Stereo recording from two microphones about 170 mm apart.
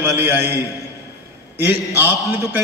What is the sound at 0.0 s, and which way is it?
Speech, 10° right (ahead or behind).